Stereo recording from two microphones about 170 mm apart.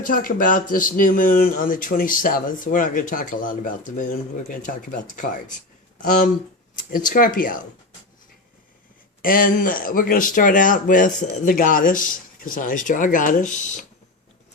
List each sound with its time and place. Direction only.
0.0 s speech: 55° left (ahead or behind)
9.2 s speech: 55° left (ahead or behind)